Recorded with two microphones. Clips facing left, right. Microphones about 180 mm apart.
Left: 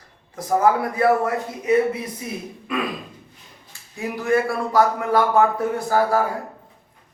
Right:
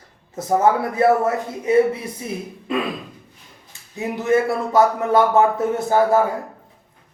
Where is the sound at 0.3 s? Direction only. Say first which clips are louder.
Right 1 dB; 25° right (ahead or behind).